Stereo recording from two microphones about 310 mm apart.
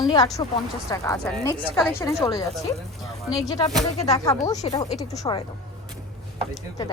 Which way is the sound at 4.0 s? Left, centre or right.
Centre.